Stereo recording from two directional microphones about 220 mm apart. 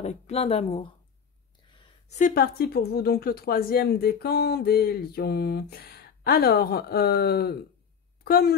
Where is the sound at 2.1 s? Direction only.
40° left (ahead or behind).